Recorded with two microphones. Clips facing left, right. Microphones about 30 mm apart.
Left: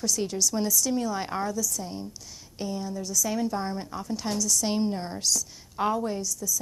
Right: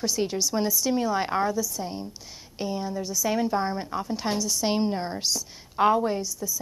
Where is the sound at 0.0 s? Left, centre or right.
Right.